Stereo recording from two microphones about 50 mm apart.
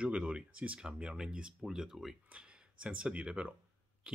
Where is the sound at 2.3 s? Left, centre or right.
Right.